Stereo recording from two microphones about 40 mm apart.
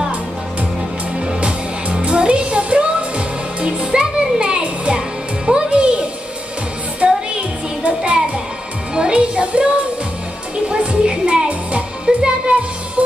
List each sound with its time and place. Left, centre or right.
1.2 s music: right
10.7 s music: right